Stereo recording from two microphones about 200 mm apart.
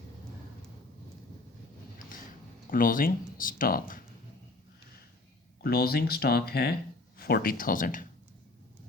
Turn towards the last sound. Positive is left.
turn(degrees=45)  # may be behind; listen again after turning